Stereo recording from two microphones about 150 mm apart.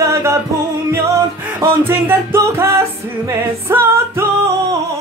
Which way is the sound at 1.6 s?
15° right (ahead or behind).